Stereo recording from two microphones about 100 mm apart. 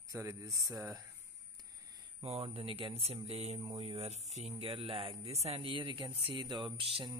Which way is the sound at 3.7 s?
80° right.